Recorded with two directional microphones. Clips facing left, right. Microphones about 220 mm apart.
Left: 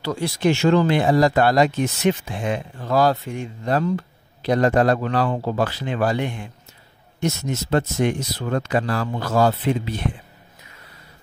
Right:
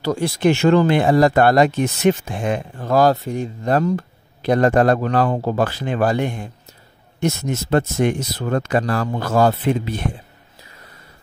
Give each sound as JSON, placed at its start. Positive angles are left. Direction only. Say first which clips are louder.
{"t": 0.0, "sound": "speech", "louder": "right 3 dB", "side_deg": -50}
{"t": 7.2, "sound": "speech", "louder": "right 3 dB", "side_deg": -55}